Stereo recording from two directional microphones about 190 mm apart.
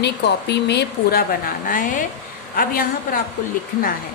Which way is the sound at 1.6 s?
45° left (ahead or behind).